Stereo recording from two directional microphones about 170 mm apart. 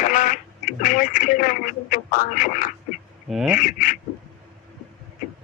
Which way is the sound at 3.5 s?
50° left (ahead or behind).